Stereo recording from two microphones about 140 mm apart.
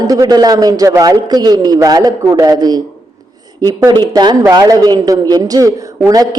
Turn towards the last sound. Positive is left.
turn(degrees=-25)  # may be behind; listen again after turning